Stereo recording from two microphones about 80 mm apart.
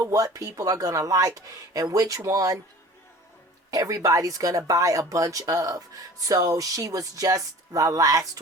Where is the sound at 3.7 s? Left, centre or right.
Right.